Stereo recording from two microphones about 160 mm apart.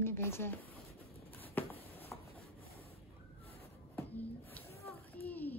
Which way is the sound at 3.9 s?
10° left (ahead or behind).